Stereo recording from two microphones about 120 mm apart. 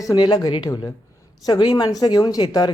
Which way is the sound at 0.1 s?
30° left (ahead or behind).